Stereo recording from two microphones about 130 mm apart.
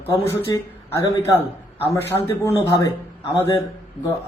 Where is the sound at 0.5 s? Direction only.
25° left (ahead or behind).